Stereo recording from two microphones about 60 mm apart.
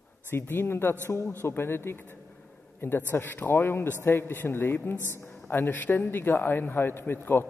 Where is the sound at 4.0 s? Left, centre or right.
Left.